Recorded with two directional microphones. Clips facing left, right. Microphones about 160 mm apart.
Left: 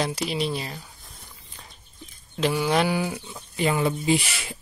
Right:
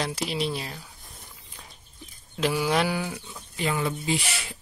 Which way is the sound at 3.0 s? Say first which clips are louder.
Left 4 dB; 15° left (ahead or behind).